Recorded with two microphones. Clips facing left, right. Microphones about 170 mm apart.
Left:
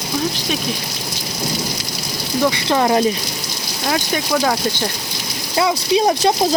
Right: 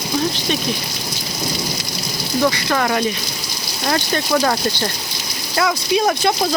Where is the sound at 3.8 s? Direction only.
5° left (ahead or behind).